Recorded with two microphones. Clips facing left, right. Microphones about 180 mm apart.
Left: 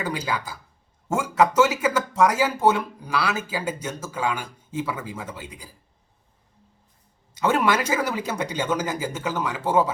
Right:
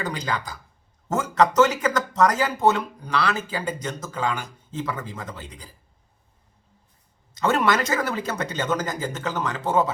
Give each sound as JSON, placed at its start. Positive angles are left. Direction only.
{"t": 0.0, "sound": "speech", "side_deg": 10}
{"t": 7.3, "sound": "speech", "side_deg": 10}